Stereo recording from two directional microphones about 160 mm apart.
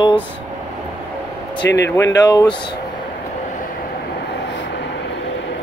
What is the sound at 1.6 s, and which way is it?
Speech, 90° left.